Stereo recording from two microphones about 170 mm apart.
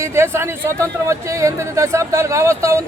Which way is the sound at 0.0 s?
15° right (ahead or behind).